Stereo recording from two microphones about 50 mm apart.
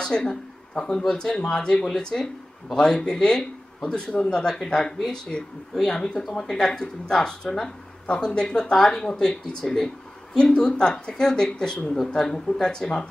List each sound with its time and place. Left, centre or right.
0.0 s speech: centre